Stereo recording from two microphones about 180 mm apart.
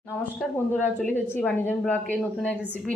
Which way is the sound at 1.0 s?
10° left (ahead or behind).